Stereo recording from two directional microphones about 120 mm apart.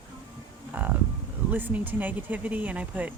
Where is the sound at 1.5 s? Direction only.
15° right (ahead or behind).